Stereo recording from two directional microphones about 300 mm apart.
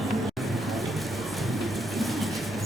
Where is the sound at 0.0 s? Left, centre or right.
Centre.